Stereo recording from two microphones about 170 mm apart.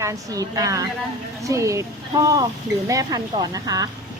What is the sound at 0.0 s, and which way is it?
Speech, 20° right (ahead or behind).